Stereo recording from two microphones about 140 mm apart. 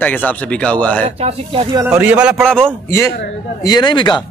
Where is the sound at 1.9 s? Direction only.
10° right (ahead or behind).